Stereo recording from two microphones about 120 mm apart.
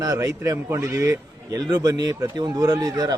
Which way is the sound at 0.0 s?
30° right (ahead or behind).